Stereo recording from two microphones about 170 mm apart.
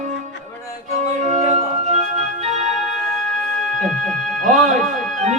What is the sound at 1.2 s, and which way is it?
Organ, 45° right (ahead or behind).